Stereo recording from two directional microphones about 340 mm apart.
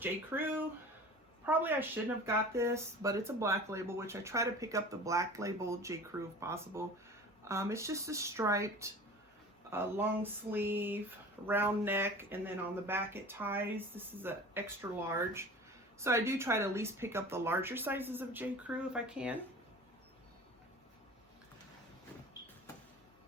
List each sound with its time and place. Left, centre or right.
0.0 s speech: centre